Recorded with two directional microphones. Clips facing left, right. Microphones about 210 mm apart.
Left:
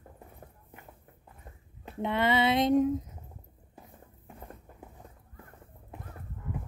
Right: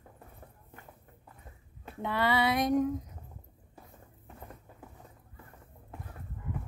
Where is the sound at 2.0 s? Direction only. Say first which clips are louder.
Left 2 dB; 20° left (ahead or behind).